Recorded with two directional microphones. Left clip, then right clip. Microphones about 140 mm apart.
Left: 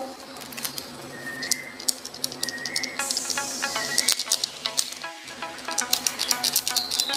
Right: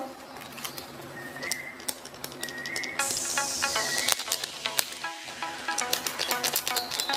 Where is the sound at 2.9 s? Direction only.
Centre (ahead or behind).